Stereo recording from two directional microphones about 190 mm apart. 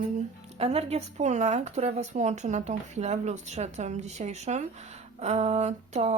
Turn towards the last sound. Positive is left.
turn(degrees=-35)  # may be behind; listen again after turning